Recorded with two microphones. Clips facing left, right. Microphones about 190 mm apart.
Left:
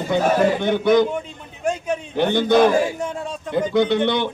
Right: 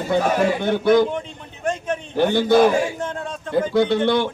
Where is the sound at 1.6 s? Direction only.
10° left (ahead or behind).